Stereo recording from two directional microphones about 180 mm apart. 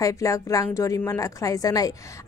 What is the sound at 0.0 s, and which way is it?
A woman's voice, 15° left (ahead or behind).